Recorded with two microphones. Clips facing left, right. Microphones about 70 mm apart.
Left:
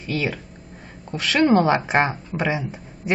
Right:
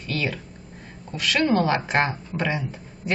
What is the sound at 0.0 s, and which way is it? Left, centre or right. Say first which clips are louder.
Speech: left 2 dB; centre.